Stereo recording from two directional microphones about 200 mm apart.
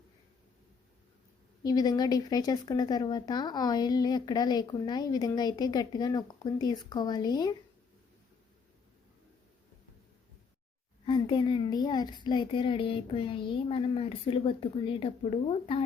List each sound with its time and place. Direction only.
1.6 s speech: 20° left (ahead or behind)
11.0 s speech: 25° left (ahead or behind)